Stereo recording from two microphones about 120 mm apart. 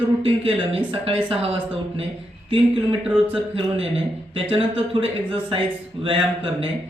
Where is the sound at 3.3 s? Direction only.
50° right (ahead or behind).